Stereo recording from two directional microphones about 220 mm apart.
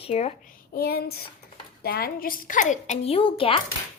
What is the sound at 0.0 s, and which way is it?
Speech, 30° left (ahead or behind).